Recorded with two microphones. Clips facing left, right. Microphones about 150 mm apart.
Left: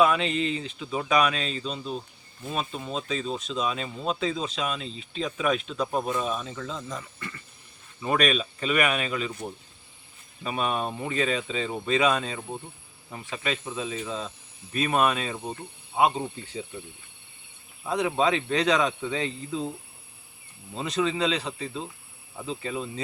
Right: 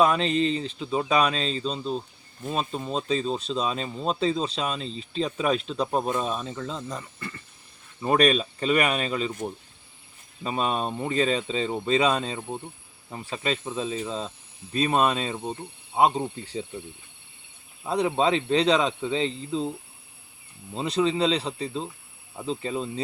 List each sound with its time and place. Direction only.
0.0 s speech: 35° right (ahead or behind)
10.4 s speech: 30° right (ahead or behind)
17.8 s speech: 30° right (ahead or behind)
20.7 s speech: 30° right (ahead or behind)